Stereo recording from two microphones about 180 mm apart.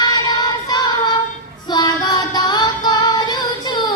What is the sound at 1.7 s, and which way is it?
Female singing, 20° left (ahead or behind).